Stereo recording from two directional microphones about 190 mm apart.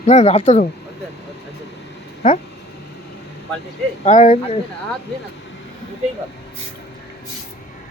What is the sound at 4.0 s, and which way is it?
Speech, 35° left (ahead or behind).